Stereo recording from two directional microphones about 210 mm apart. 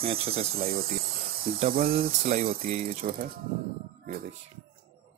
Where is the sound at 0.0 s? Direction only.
25° right (ahead or behind).